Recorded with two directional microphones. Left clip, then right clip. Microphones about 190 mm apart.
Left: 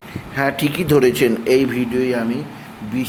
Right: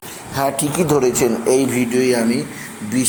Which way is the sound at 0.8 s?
15° left (ahead or behind).